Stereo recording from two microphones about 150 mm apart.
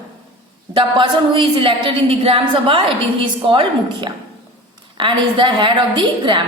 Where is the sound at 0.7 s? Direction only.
30° right (ahead or behind).